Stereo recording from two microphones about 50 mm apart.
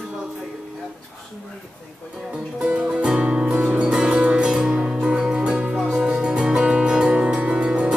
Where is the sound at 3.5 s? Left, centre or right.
Right.